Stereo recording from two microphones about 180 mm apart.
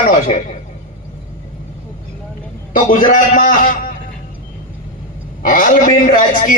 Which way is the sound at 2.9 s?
50° left (ahead or behind).